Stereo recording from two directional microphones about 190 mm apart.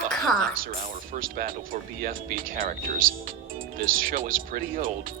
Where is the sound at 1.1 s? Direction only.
50° right (ahead or behind).